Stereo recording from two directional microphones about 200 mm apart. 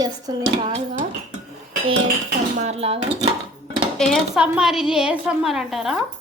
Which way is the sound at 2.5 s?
35° right (ahead or behind).